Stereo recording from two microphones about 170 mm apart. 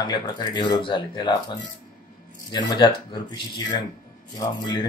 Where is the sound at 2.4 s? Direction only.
25° left (ahead or behind).